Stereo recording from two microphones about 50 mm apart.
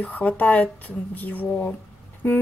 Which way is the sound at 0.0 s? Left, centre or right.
Left.